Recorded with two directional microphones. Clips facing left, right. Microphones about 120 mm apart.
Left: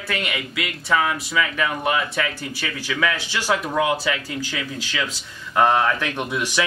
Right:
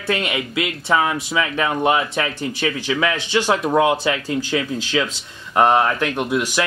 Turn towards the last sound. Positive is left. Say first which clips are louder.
# right 5 dB
turn(degrees=-15)  # may be behind; listen again after turning